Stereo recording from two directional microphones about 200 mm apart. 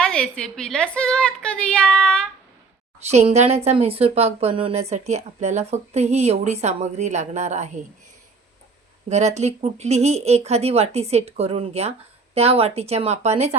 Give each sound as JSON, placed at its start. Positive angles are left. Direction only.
{"t": 0.0, "sound": "a woman's voice", "side_deg": 5}
{"t": 3.0, "sound": "speech", "side_deg": -35}
{"t": 9.0, "sound": "speech", "side_deg": -35}